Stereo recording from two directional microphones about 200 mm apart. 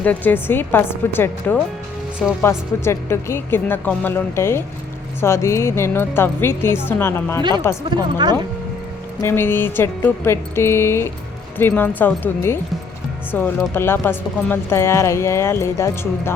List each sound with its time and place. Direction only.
0.0 s speech: 10° left (ahead or behind)
7.9 s speech: 20° right (ahead or behind)
9.2 s speech: 10° left (ahead or behind)